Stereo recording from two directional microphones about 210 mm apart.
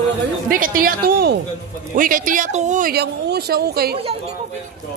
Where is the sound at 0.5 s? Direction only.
40° right (ahead or behind).